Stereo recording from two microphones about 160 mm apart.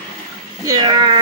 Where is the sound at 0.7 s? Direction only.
25° right (ahead or behind).